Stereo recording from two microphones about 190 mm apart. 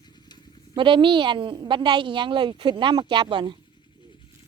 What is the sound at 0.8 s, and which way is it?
A woman's voice, 25° right (ahead or behind).